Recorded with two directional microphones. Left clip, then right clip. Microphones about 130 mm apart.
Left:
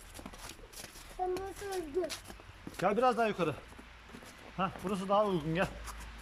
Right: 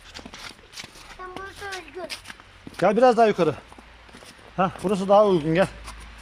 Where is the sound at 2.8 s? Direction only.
50° right (ahead or behind).